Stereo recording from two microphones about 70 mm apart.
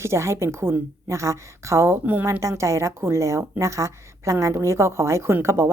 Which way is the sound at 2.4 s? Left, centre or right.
Right.